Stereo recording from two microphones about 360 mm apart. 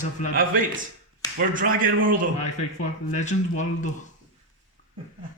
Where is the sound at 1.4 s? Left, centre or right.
Right.